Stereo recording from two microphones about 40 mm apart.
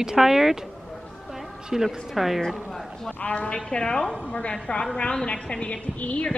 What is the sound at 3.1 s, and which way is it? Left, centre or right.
Speech, left.